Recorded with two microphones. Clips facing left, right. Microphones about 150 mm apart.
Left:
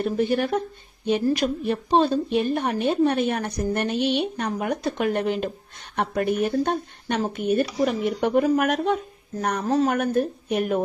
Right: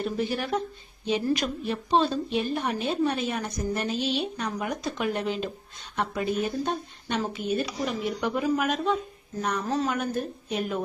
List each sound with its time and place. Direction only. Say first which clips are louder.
0.0 s a woman's voice: left 6 dB; 50° left (ahead or behind)
4.4 s a woman's voice: left 5 dB; 50° left (ahead or behind)